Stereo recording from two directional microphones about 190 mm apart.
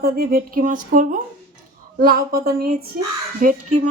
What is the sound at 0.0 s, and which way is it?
Speech, 50° right (ahead or behind).